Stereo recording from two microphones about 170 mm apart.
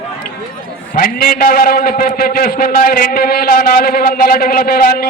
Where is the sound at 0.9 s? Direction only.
60° left (ahead or behind).